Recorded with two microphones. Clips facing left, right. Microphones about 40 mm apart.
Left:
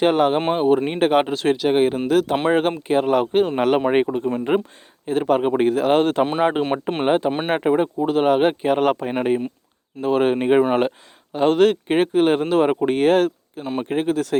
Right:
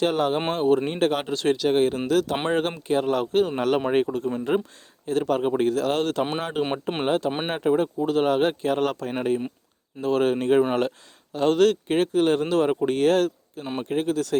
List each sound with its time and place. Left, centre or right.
0.0 s speech: left
8.0 s speech: centre
10.0 s speech: centre